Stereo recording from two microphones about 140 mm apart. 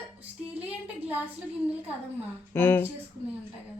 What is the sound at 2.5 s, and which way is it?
Speech, 15° left (ahead or behind).